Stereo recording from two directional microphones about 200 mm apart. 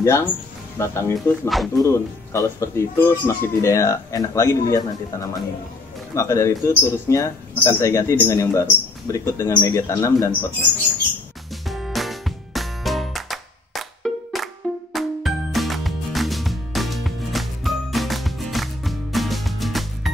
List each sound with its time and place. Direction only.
0.0 s speech: 10° left (ahead or behind)
11.6 s music: centre (ahead or behind)